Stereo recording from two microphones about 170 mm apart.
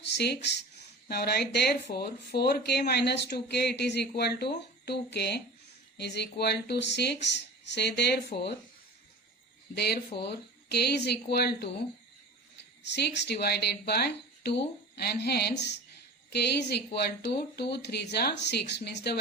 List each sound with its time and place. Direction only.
0.0 s a sound: 75° left (ahead or behind)
0.8 s speech: 70° left (ahead or behind); by 8.5 s 85° left
9.7 s speech: 70° left (ahead or behind)
12.8 s speech: 80° left